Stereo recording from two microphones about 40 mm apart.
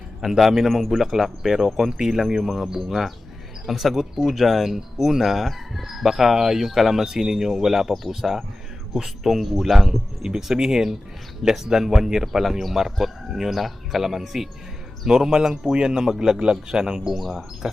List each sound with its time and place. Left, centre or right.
0.2 s speech: centre
17.2 s speech: centre